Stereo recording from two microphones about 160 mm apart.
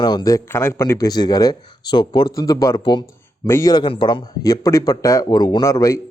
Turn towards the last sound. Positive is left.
turn(degrees=20)  # may be behind; listen again after turning